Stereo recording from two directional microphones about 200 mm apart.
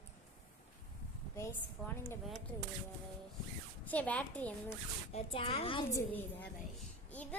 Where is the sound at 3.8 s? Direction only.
5° left (ahead or behind).